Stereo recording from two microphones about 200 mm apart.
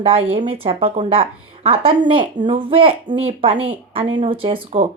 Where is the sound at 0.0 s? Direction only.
30° right (ahead or behind).